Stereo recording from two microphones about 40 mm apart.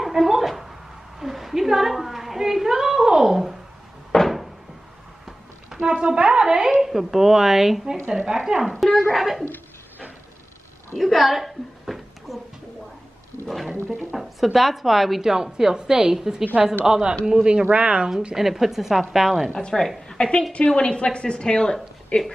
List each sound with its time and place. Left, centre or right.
0.0 s a sound: centre
4.1 s a sound: centre
5.8 s a woman's voice: right
6.8 s a woman's voice: centre
8.5 s speech: right
9.1 s a woman's voice: centre
11.0 s a sound: centre
14.1 s a woman's voice: centre; by 18.1 s right
18.3 s a woman's voice: centre
19.7 s a woman's voice: centre
20.1 s a woman's voice: left